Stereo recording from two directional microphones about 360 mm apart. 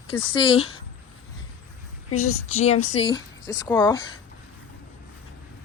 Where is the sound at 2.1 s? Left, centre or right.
Left.